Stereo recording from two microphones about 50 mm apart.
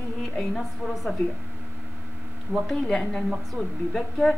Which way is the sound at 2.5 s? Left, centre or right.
Centre.